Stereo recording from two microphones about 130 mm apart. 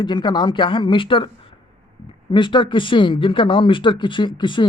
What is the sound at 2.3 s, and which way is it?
Speech, 40° left (ahead or behind).